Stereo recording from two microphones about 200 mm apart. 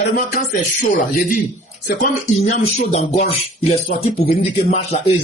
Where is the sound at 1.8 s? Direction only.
45° left (ahead or behind).